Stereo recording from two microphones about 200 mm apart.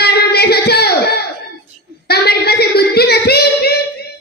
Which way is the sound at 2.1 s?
50° left (ahead or behind).